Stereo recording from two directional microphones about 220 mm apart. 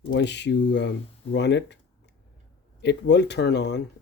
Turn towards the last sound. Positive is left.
turn(degrees=50)  # may be behind; listen again after turning